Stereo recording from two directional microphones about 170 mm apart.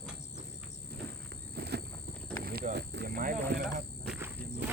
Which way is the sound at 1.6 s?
70° right (ahead or behind).